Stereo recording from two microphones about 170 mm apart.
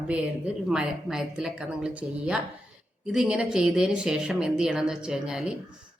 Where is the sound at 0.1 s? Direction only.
5° right (ahead or behind).